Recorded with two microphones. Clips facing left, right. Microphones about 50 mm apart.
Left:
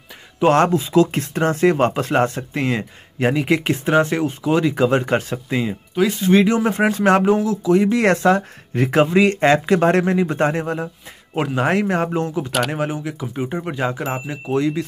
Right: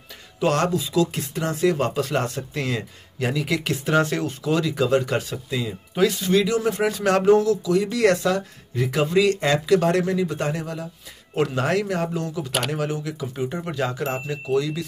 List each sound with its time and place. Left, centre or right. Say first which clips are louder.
0.4 s speech: left 6 dB; left
1.2 s speech: left 5 dB; left; by 7.5 s centre
7.6 s speech: left 4 dB; left
9.0 s speech: left 3 dB; left
11.3 s speech: left 3 dB; left
12.4 s speech: left 5 dB; centre
12.7 s speech: left 3 dB; left
14.5 s speech: left 4 dB; left